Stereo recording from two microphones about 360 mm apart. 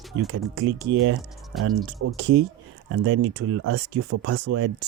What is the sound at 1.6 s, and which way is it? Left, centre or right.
Speech, right.